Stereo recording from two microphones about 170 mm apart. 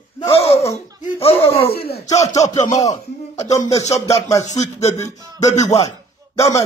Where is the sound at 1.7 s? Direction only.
70° left (ahead or behind).